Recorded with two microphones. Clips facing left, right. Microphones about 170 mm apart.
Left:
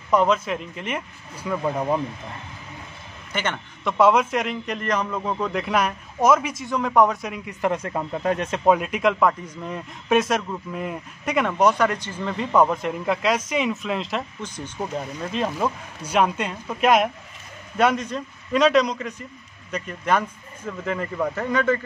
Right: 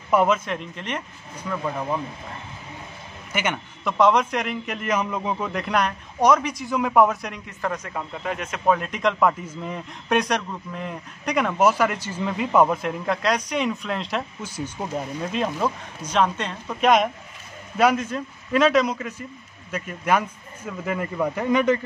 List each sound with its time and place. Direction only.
0.1 s speech: 5° right (ahead or behind)
0.5 s speech: 5° left (ahead or behind)
1.5 s speech: 20° left (ahead or behind)
3.3 s a man's voice: 10° right (ahead or behind)
4.0 s a man's voice: 5° left (ahead or behind); by 5.5 s 10° right (ahead or behind)
5.5 s a man's voice: centre (ahead or behind)
7.6 s speech: 30° left (ahead or behind)
8.6 s a man's voice: 10° left (ahead or behind); by 21.7 s 15° right (ahead or behind)